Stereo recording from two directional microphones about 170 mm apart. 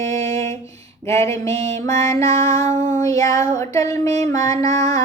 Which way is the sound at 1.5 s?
40° right (ahead or behind).